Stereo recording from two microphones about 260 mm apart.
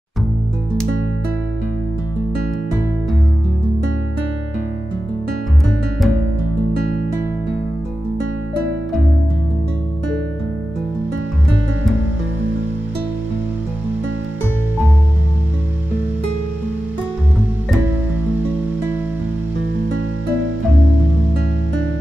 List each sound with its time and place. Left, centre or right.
5.7 s music: centre